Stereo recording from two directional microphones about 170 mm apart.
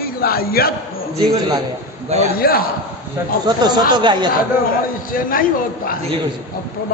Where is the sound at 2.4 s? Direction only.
65° left (ahead or behind).